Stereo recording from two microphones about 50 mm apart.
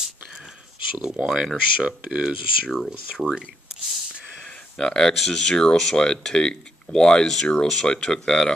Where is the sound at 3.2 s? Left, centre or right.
Right.